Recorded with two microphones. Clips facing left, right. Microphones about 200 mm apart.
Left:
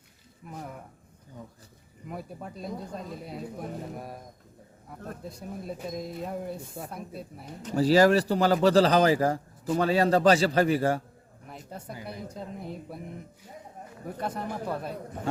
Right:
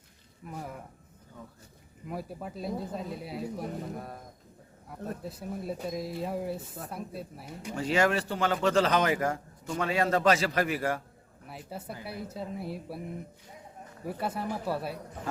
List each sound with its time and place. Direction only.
0.4 s speech: centre (ahead or behind)
2.0 s speech: centre (ahead or behind)
4.9 s speech: 5° right (ahead or behind)
7.8 s speech: 35° left (ahead or behind)
11.4 s speech: 5° right (ahead or behind)
14.2 s speech: 5° right (ahead or behind)